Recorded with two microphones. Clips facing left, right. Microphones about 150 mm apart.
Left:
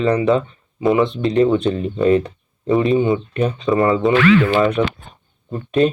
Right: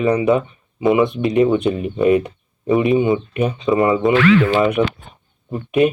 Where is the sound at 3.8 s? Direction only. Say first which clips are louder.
Even; 20° right (ahead or behind).